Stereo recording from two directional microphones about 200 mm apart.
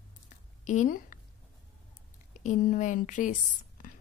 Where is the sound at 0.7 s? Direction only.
40° left (ahead or behind).